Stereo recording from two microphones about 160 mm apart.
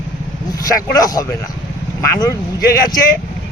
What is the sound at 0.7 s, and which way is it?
Speech, 20° left (ahead or behind).